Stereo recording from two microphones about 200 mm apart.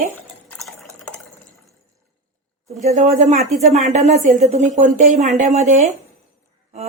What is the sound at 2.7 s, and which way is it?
Speech, 35° right (ahead or behind).